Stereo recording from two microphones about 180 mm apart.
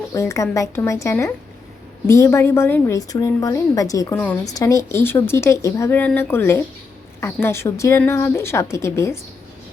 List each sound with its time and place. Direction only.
0.1 s a woman's voice: 15° left (ahead or behind)